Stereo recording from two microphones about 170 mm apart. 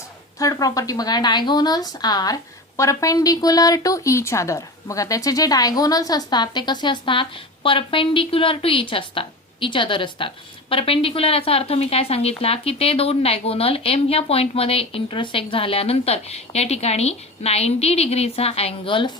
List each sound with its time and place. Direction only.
0.3 s speech: 20° left (ahead or behind)